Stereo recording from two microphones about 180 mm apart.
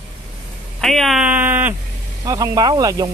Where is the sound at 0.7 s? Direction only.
Centre (ahead or behind).